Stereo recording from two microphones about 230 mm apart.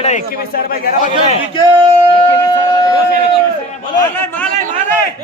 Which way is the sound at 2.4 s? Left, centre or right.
Centre.